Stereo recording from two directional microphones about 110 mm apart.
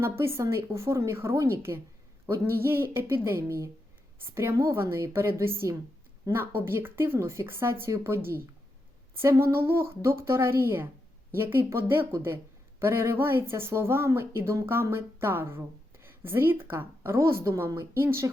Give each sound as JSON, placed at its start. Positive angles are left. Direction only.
{"t": 0.0, "sound": "speech", "side_deg": -25}